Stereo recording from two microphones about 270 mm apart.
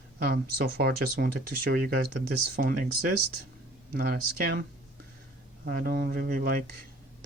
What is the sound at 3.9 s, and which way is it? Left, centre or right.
Speech, right.